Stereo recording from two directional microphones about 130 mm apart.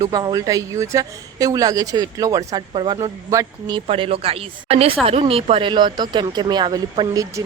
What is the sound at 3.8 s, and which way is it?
Speech, 45° right (ahead or behind).